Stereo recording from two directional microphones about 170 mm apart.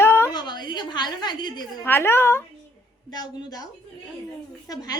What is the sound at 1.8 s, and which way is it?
A woman's voice, 15° left (ahead or behind).